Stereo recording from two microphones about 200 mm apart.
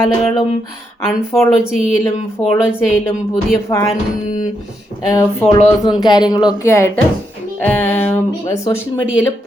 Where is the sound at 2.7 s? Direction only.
10° left (ahead or behind).